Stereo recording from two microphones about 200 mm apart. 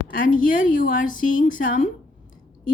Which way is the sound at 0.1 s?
40° left (ahead or behind).